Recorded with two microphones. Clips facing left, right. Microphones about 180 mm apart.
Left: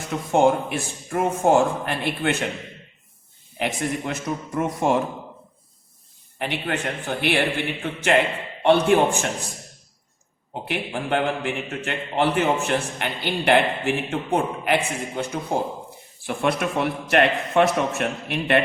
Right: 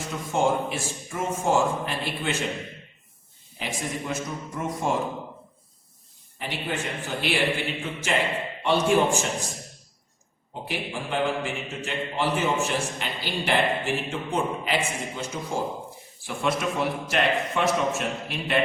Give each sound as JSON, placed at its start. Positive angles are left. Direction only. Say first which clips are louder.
{"t": 0.1, "sound": "a man's voice", "louder": "left 6 dB", "side_deg": 60}
{"t": 3.6, "sound": "a man's voice", "louder": "left 6 dB", "side_deg": 65}
{"t": 6.4, "sound": "a man's voice", "louder": "left 4 dB", "side_deg": 65}
{"t": 10.5, "sound": "a man's voice", "louder": "left 4 dB", "side_deg": 60}